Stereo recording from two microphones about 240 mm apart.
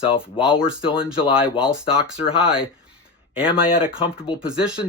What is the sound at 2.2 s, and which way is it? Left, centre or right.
Speech, left.